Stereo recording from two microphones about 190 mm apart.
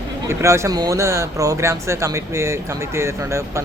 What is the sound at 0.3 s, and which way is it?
Speech, 15° right (ahead or behind).